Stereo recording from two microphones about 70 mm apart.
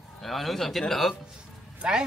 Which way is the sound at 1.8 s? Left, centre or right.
Centre.